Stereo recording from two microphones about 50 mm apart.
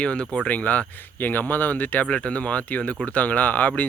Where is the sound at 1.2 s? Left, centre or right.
Left.